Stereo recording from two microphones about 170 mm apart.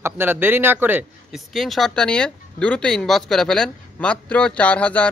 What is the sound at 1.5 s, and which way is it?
Speech, centre (ahead or behind).